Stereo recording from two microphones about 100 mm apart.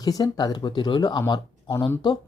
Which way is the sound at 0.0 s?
40° left (ahead or behind).